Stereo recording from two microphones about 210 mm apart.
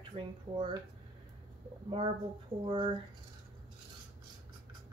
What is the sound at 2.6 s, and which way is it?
Speech, 25° right (ahead or behind).